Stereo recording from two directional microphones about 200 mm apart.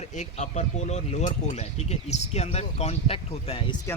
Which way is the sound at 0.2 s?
35° left (ahead or behind).